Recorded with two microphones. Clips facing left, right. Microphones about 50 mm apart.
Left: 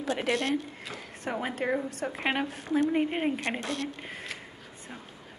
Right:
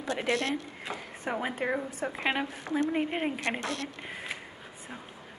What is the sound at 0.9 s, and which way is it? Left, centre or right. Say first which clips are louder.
Speech: right 5 dB; right.